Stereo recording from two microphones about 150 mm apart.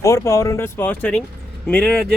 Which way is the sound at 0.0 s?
20° left (ahead or behind).